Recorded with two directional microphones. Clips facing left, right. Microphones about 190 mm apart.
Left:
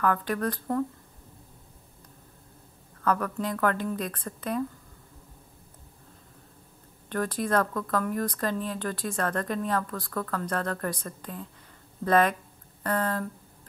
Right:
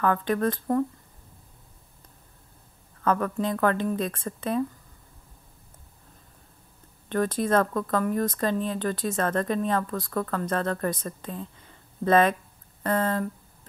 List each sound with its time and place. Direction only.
0.0 s speech: 20° right (ahead or behind)
3.0 s speech: 25° right (ahead or behind)
7.1 s speech: 20° right (ahead or behind)